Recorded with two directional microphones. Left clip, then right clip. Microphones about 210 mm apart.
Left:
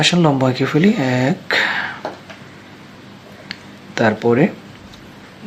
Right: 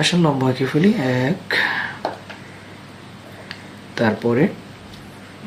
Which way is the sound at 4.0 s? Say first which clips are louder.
Left 4 dB; 40° left (ahead or behind).